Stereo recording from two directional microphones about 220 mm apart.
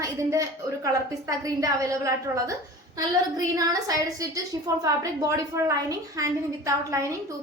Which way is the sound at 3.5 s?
15° right (ahead or behind).